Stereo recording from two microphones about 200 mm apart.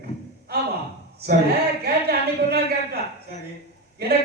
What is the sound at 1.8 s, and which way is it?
A man's voice, 55° right (ahead or behind).